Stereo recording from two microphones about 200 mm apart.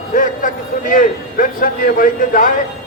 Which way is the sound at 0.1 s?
40° left (ahead or behind).